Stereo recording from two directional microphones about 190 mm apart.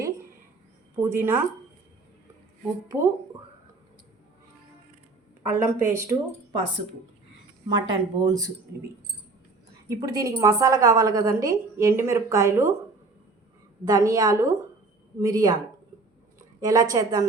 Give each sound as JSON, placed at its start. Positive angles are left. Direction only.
{"t": 0.9, "sound": "a woman's voice", "side_deg": -10}
{"t": 5.4, "sound": "a woman's voice", "side_deg": -15}
{"t": 7.7, "sound": "speech", "side_deg": -20}
{"t": 10.0, "sound": "a woman's voice", "side_deg": -15}
{"t": 13.8, "sound": "a woman's voice", "side_deg": -20}
{"t": 16.6, "sound": "speech", "side_deg": -20}